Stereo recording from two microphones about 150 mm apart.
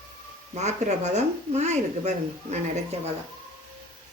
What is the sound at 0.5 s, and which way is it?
Speech, 50° right (ahead or behind).